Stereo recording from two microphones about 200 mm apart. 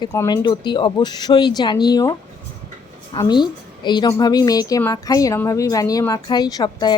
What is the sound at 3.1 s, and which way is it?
A woman's voice, 20° left (ahead or behind).